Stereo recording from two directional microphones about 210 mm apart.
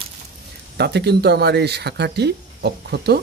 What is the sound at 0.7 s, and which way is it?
Speech, 50° right (ahead or behind).